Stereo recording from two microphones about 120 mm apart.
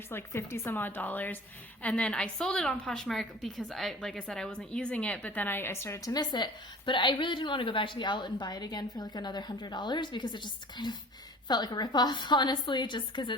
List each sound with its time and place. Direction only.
0.1 s a woman's voice: 20° left (ahead or behind)
6.1 s a woman's voice: 35° left (ahead or behind)